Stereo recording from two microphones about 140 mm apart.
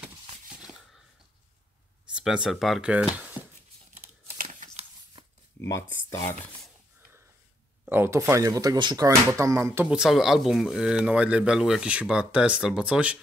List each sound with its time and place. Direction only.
2.1 s speech: 5° right (ahead or behind)
5.6 s speech: 20° left (ahead or behind)
7.8 s speech: 15° right (ahead or behind)